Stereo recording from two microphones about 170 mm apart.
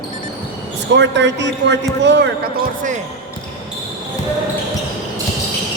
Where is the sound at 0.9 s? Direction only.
90° right.